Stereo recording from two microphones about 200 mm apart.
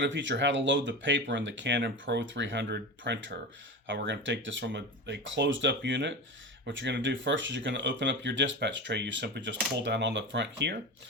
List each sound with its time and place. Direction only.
0.0 s speech: 65° right (ahead or behind)